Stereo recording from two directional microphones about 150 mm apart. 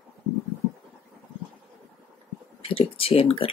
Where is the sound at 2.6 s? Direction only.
40° left (ahead or behind).